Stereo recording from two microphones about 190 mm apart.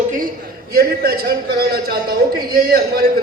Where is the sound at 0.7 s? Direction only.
55° right (ahead or behind).